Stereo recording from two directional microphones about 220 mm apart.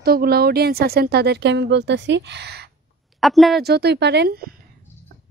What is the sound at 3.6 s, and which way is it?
Speech, 45° right (ahead or behind).